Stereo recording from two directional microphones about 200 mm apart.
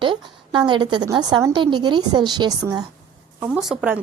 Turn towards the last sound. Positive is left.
turn(degrees=-5)  # may be behind; listen again after turning